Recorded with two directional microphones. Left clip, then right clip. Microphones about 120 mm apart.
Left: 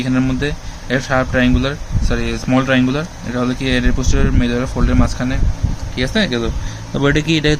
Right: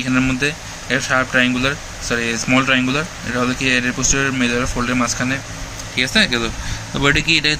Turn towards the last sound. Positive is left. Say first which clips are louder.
# even
turn(degrees=55)  # may be behind; listen again after turning